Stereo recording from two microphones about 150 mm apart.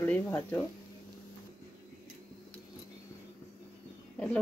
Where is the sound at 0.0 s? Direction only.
15° left (ahead or behind).